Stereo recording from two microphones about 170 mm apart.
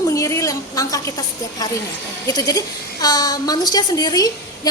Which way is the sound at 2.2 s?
20° left (ahead or behind).